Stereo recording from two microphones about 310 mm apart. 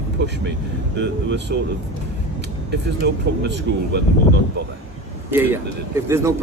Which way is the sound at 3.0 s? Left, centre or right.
Right.